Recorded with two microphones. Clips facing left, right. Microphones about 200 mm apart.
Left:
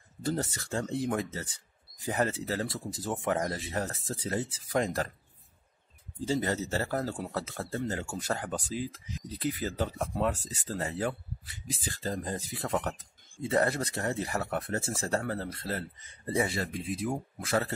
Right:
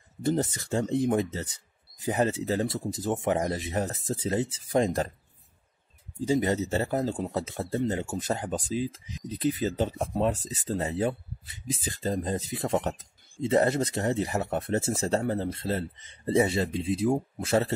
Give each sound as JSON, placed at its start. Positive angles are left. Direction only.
{"t": 0.2, "sound": "speech", "side_deg": -20}
{"t": 6.2, "sound": "speech", "side_deg": -20}